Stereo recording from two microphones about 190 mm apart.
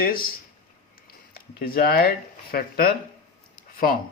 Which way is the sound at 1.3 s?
50° left (ahead or behind).